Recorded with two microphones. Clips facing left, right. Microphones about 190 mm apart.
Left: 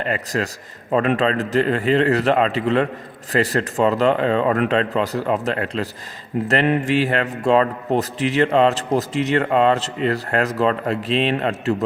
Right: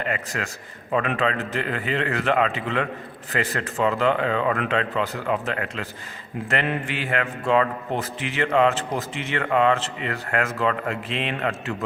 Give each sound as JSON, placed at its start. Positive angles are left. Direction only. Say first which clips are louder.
{"t": 0.0, "sound": "a man's voice", "louder": "left 5 dB", "side_deg": 35}
{"t": 9.4, "sound": "a man's voice", "louder": "even", "side_deg": 30}